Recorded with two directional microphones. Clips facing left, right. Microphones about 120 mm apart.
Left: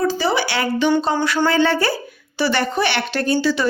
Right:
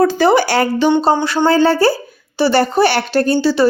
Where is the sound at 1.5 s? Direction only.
35° right (ahead or behind).